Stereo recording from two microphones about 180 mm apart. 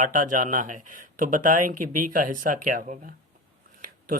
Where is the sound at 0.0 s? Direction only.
45° right (ahead or behind).